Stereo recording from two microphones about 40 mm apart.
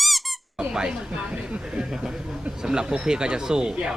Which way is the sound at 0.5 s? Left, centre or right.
Centre.